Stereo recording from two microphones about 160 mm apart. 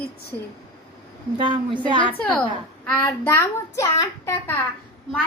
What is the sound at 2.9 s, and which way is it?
A woman's voice, 10° left (ahead or behind).